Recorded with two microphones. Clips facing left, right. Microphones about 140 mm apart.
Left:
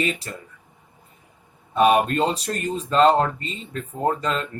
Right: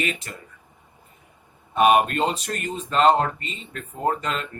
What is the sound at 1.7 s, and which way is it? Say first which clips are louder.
Speech: even; 35° left (ahead or behind).